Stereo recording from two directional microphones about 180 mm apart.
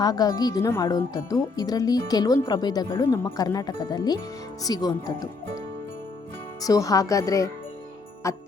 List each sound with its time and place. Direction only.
0.0 s speech: 20° left (ahead or behind)
6.6 s speech: 20° left (ahead or behind)